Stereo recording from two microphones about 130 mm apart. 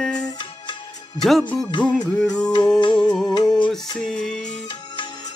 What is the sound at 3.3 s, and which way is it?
Music, 35° left (ahead or behind).